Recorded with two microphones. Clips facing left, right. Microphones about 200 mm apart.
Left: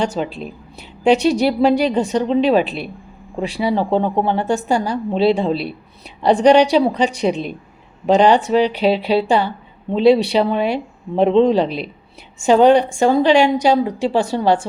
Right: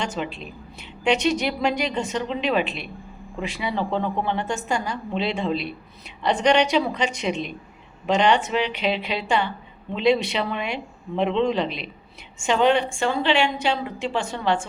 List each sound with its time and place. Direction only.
0.0 s speech: 35° left (ahead or behind)